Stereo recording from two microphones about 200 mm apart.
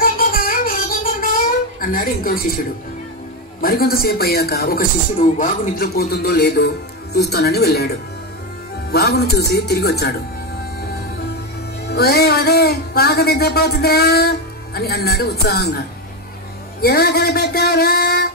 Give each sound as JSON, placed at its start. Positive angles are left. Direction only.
{"t": 0.0, "sound": "a sound", "side_deg": 45}
{"t": 3.6, "sound": "music", "side_deg": 50}
{"t": 11.9, "sound": "music", "side_deg": 50}
{"t": 16.8, "sound": "music", "side_deg": 50}